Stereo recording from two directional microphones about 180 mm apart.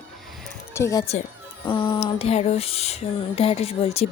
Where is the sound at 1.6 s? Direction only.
25° left (ahead or behind).